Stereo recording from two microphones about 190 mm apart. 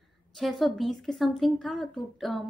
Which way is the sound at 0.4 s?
Centre (ahead or behind).